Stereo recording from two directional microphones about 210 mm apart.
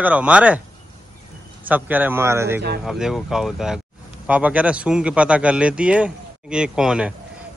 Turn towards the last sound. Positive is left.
turn(degrees=-5)  # may be behind; listen again after turning